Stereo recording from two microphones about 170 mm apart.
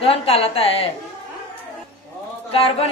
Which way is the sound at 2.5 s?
35° left (ahead or behind).